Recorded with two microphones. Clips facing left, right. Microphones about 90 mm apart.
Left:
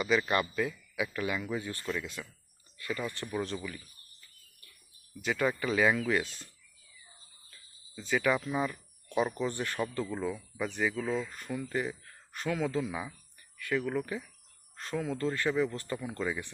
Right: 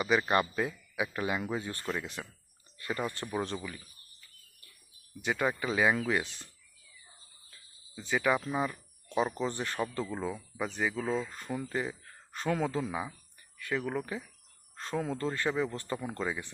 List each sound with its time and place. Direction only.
0.0 s speech: 25° right (ahead or behind)
3.5 s speech: 15° right (ahead or behind)
5.2 s speech: 20° right (ahead or behind)
7.9 s speech: 15° right (ahead or behind)
10.1 s speech: 10° right (ahead or behind); by 16.3 s 25° right (ahead or behind)